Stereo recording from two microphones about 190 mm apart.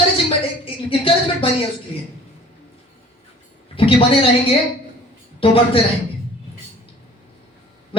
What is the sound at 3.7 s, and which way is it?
Speech, 30° left (ahead or behind).